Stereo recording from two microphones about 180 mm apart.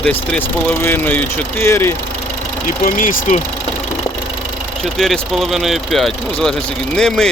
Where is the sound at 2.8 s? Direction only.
50° left (ahead or behind).